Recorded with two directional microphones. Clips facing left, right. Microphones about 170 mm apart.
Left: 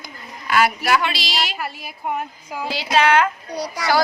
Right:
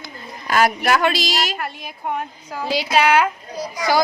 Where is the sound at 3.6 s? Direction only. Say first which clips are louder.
Right 1 dB; 70° left (ahead or behind).